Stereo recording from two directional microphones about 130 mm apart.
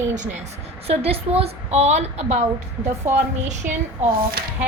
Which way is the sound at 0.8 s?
50° right (ahead or behind).